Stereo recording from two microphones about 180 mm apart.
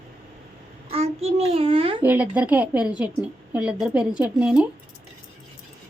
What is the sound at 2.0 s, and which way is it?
A woman's voice, 10° right (ahead or behind).